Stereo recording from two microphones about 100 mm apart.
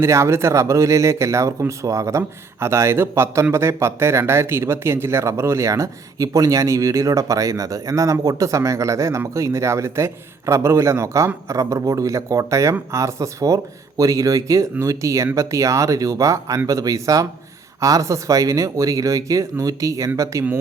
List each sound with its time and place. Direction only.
0.0 s speech: 30° right (ahead or behind)